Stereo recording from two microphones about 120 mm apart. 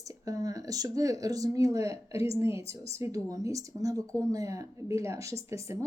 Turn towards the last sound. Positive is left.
turn(degrees=-25)  # may be behind; listen again after turning